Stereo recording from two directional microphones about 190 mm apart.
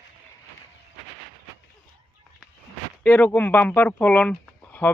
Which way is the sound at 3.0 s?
10° left (ahead or behind).